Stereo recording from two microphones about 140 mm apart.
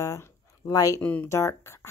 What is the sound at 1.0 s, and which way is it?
Speech, 10° left (ahead or behind).